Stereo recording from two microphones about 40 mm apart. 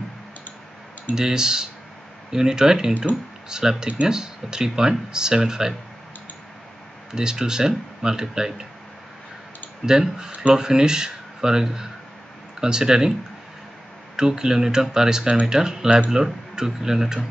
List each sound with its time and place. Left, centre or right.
1.1 s speech: centre
7.1 s speech: centre
9.8 s speech: centre
14.1 s speech: centre